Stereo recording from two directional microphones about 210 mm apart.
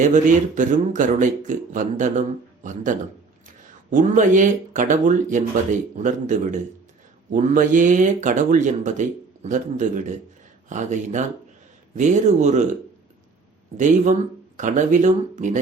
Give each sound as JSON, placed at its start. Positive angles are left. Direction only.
{"t": 0.0, "sound": "speech", "side_deg": -35}
{"t": 13.7, "sound": "speech", "side_deg": -35}